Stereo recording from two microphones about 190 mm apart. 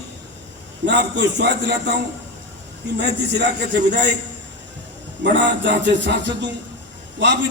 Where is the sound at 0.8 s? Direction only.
65° right (ahead or behind).